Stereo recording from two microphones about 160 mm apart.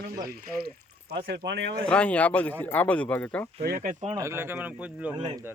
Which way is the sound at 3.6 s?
65° right (ahead or behind).